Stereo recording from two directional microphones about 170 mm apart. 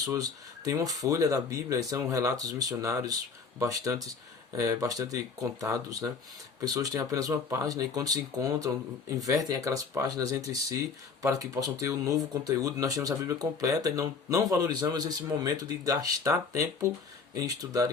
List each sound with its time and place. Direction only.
0.0 s speech: 20° right (ahead or behind)